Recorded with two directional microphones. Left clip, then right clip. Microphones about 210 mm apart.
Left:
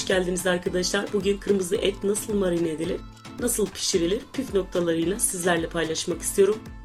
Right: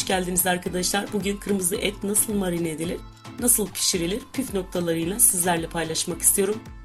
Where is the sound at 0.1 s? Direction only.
35° right (ahead or behind).